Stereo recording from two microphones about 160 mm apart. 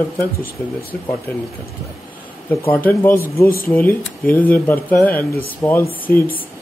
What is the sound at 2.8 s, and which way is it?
Speech, 15° left (ahead or behind).